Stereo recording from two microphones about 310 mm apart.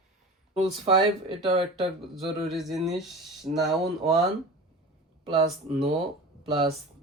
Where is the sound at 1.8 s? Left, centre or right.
Centre.